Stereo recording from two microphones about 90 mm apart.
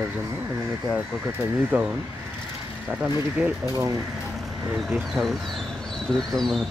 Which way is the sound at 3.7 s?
40° right (ahead or behind).